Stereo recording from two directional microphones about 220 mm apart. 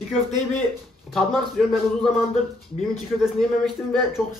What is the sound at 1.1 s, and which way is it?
Speech, centre (ahead or behind).